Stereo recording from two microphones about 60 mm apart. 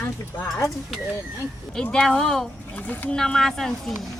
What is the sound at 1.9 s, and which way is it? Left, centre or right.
Speech, centre.